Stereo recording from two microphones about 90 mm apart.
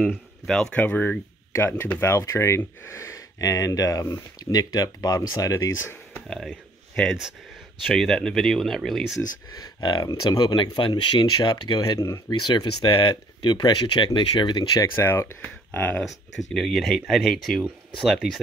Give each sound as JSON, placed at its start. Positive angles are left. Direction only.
{"t": 0.5, "sound": "speech", "side_deg": 10}
{"t": 2.0, "sound": "speech", "side_deg": 30}
{"t": 6.2, "sound": "speech", "side_deg": 0}
{"t": 7.8, "sound": "speech", "side_deg": 5}
{"t": 9.8, "sound": "speech", "side_deg": 50}
{"t": 11.8, "sound": "speech", "side_deg": 40}
{"t": 12.3, "sound": "speech", "side_deg": 55}
{"t": 15.0, "sound": "speech", "side_deg": 25}
{"t": 16.0, "sound": "speech", "side_deg": 0}